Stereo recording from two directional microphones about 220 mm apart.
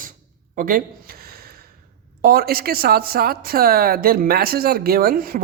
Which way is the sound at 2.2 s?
40° right (ahead or behind).